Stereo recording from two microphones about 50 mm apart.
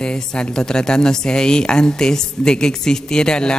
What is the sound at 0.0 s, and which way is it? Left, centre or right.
A man's voice, centre.